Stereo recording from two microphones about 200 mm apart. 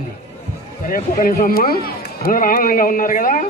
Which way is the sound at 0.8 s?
45° left (ahead or behind).